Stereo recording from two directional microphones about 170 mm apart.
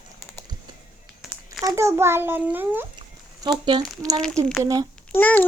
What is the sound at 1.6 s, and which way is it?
A child's voice, 15° right (ahead or behind).